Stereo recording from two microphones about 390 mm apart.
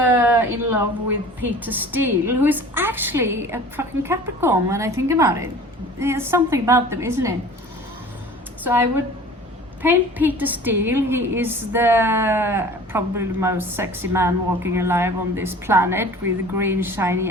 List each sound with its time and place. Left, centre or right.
0.0 s a sound: centre
1.4 s a woman's voice: centre
8.6 s a woman's voice: centre